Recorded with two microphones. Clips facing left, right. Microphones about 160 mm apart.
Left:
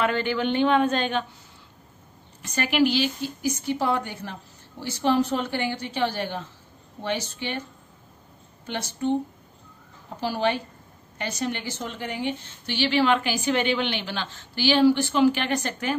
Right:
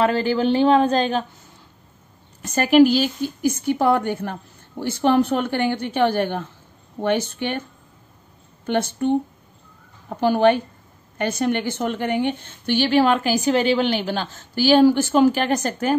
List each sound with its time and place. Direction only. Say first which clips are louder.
0.0 s speech: right 5 dB; 35° right (ahead or behind)
2.4 s a woman's voice: right 8 dB; 45° right (ahead or behind)
8.6 s a woman's voice: right 6 dB; 55° right (ahead or behind)